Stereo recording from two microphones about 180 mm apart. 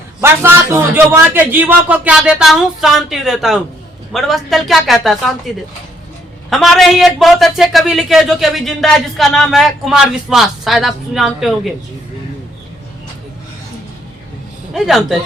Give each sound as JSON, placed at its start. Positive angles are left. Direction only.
{"t": 0.2, "sound": "speech", "side_deg": -10}
{"t": 6.5, "sound": "speech", "side_deg": 0}
{"t": 14.7, "sound": "speech", "side_deg": 0}